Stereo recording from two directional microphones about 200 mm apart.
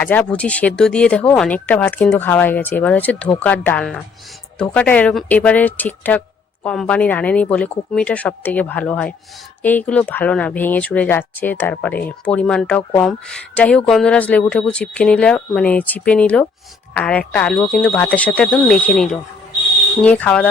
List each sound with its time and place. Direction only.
0.0 s speech: 10° left (ahead or behind)